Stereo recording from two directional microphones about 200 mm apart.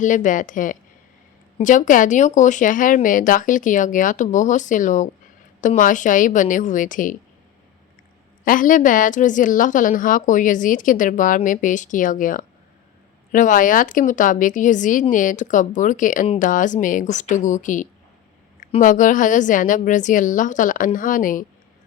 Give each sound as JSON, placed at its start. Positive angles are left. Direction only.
{"t": 0.0, "sound": "speech", "side_deg": 40}
{"t": 8.4, "sound": "speech", "side_deg": 40}